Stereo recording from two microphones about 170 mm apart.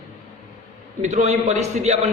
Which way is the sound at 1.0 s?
40° right (ahead or behind).